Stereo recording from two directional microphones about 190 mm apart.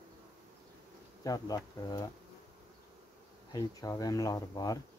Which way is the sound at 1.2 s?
20° left (ahead or behind).